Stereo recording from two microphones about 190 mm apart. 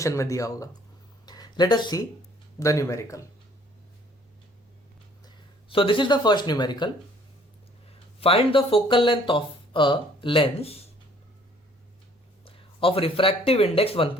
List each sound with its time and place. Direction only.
0.0 s speech: 15° left (ahead or behind)
1.2 s a sound: 20° left (ahead or behind)
2.6 s speech: 15° left (ahead or behind)
5.2 s speech: 30° left (ahead or behind)
8.2 s speech: 30° left (ahead or behind)
12.5 s speech: 30° left (ahead or behind)